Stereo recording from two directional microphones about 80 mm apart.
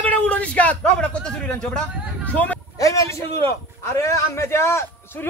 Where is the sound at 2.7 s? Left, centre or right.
Left.